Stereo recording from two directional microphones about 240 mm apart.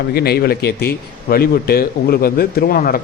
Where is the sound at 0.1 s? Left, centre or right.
Left.